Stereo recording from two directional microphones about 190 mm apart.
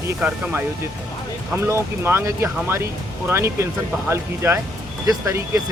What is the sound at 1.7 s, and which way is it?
Speech, 10° right (ahead or behind).